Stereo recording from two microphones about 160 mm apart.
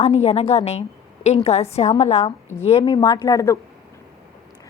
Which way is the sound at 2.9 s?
25° left (ahead or behind).